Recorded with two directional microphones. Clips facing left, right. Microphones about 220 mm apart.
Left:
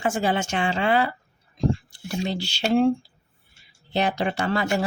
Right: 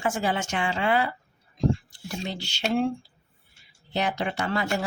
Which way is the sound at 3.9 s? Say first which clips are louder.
Left 3 dB; 30° left (ahead or behind).